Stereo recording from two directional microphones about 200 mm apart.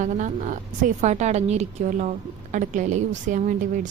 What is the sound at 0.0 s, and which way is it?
A woman's voice, 40° right (ahead or behind).